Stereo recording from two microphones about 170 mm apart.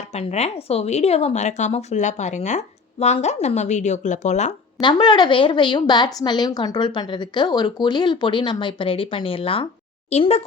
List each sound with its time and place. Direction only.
0.1 s speech: 40° left (ahead or behind)
4.8 s a woman's voice: 25° left (ahead or behind)